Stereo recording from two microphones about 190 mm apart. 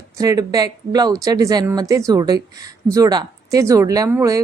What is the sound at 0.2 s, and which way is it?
Speech, 20° right (ahead or behind).